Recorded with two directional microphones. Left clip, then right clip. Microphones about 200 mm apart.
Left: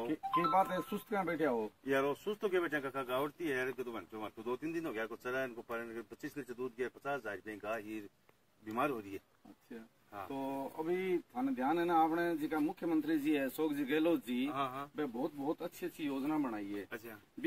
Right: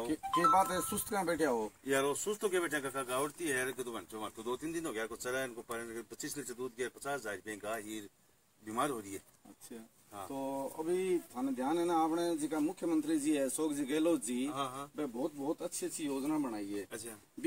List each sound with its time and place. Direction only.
0.3 s speech: 20° right (ahead or behind)
1.1 s speech: 10° left (ahead or behind)
1.9 s speech: centre (ahead or behind)
10.1 s speech: centre (ahead or behind)
14.5 s speech: centre (ahead or behind)
15.0 s speech: 15° left (ahead or behind)